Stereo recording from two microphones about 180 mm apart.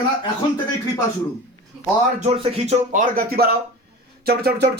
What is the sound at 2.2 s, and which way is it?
Speech, 35° right (ahead or behind).